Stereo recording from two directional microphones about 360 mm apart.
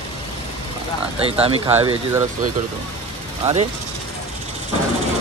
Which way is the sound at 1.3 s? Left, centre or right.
Centre.